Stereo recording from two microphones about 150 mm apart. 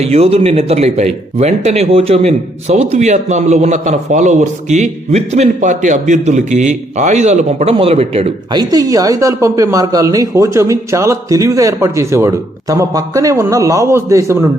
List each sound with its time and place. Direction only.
0.0 s speech: 45° right (ahead or behind)
8.5 s speech: 25° right (ahead or behind)